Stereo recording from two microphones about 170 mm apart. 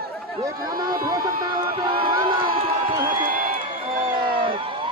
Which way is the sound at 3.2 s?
55° right (ahead or behind).